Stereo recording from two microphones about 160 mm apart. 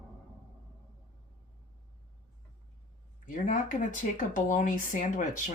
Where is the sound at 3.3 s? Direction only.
55° left (ahead or behind).